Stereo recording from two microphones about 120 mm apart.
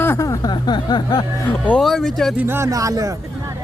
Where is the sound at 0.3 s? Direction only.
35° left (ahead or behind).